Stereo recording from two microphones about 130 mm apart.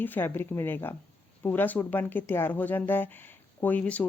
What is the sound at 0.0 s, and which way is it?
Speech, 15° left (ahead or behind).